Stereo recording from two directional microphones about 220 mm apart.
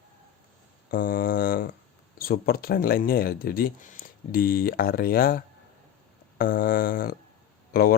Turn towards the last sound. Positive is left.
turn(degrees=40)  # may be behind; listen again after turning